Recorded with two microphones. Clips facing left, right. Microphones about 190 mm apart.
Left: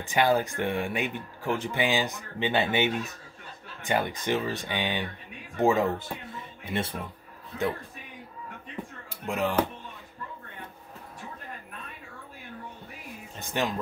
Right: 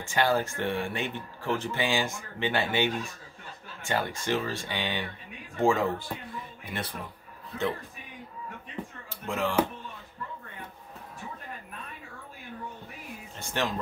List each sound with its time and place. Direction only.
0.1 s speech: 15° left (ahead or behind)
9.2 s speech: 15° left (ahead or behind)
13.4 s speech: 15° left (ahead or behind)